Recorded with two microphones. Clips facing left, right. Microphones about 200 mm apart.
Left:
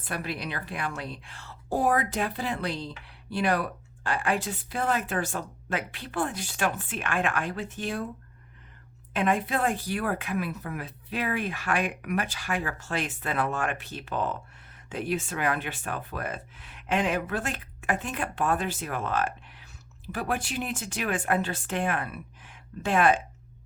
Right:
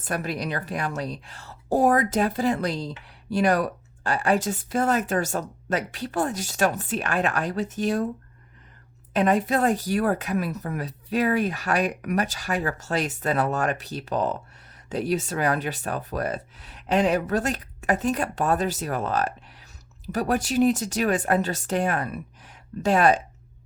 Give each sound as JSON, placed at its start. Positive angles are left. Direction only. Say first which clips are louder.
{"t": 0.0, "sound": "a woman's voice", "louder": "right 5 dB", "side_deg": -45}
{"t": 9.1, "sound": "a woman's voice", "louder": "right 5 dB", "side_deg": -40}